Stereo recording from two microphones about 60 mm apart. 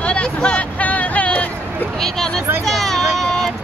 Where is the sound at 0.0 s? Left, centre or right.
Centre.